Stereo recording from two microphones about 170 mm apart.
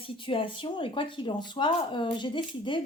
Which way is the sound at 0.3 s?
30° left (ahead or behind).